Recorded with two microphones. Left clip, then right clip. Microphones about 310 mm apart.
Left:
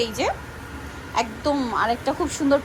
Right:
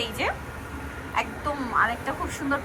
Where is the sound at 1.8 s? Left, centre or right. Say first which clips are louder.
Left 3 dB; centre.